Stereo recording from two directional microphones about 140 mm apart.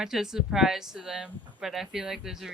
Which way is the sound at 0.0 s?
5° right (ahead or behind).